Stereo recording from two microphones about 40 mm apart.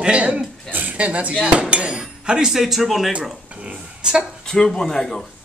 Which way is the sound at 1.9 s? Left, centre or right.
Centre.